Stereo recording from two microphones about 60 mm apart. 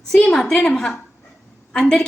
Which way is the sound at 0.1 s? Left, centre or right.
Centre.